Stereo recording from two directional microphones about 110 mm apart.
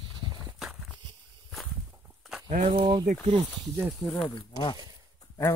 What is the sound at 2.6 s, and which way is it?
Speech, 45° right (ahead or behind).